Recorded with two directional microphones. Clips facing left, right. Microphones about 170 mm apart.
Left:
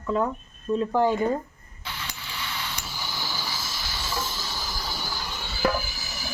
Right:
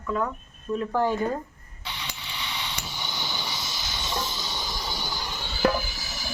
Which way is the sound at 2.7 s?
Centre (ahead or behind).